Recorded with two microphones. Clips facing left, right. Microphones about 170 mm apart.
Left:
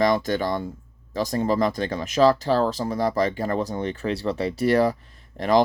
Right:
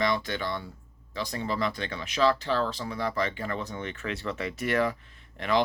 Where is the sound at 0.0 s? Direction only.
40° left (ahead or behind).